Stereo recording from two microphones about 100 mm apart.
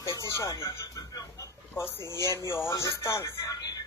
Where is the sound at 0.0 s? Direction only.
30° left (ahead or behind).